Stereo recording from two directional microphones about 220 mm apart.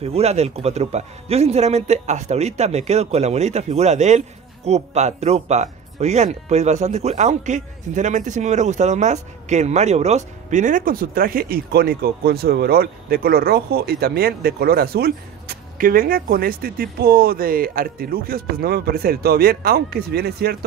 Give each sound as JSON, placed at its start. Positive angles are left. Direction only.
{"t": 0.0, "sound": "speech", "side_deg": -30}